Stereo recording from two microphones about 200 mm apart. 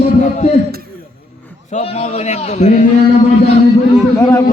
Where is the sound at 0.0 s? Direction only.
35° left (ahead or behind).